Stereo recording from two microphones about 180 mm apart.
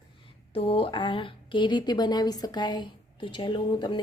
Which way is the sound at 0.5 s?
30° left (ahead or behind).